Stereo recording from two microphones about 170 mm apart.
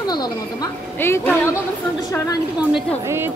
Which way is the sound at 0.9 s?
15° left (ahead or behind).